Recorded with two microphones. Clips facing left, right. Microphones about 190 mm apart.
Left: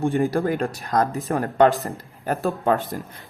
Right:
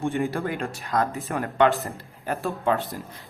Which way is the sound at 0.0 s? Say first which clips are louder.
Left 5 dB; 35° left (ahead or behind).